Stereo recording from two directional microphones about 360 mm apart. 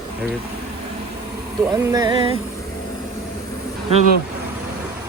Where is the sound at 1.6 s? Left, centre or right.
Centre.